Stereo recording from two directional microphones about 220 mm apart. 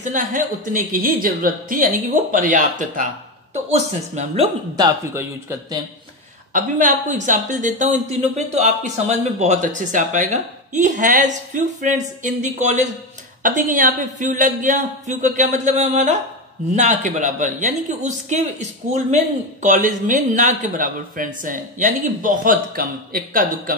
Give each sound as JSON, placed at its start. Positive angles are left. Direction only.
{"t": 0.0, "sound": "a woman's voice", "side_deg": -35}
{"t": 4.7, "sound": "speech", "side_deg": -15}
{"t": 6.5, "sound": "a woman's voice", "side_deg": -35}